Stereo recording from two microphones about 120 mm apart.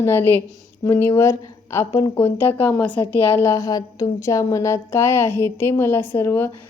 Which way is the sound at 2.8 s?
40° left (ahead or behind).